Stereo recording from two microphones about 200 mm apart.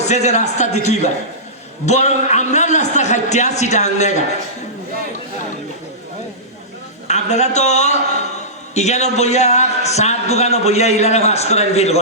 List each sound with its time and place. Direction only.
0.0 s a man's voice: 35° left (ahead or behind)
7.1 s a man's voice: 35° left (ahead or behind)